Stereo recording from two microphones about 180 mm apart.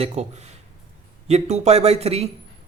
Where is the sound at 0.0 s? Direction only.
35° right (ahead or behind).